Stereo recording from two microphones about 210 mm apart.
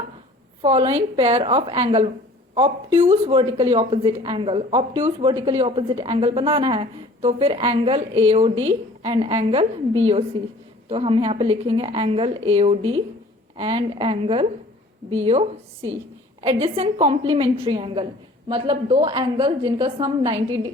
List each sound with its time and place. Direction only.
0.6 s a woman's voice: 25° right (ahead or behind)
3.1 s a woman's voice: 30° right (ahead or behind)